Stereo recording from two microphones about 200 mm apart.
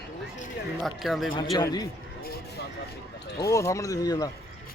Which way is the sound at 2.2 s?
50° left (ahead or behind).